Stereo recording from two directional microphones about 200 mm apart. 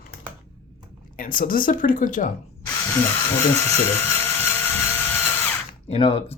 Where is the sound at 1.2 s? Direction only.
45° left (ahead or behind).